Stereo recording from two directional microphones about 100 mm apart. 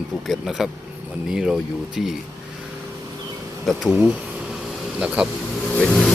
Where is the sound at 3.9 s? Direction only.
10° right (ahead or behind).